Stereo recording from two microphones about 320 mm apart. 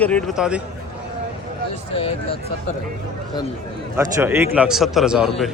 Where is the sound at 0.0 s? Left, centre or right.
Centre.